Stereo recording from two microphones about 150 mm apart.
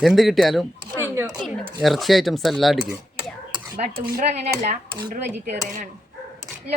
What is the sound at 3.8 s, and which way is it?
Speech, 65° right (ahead or behind).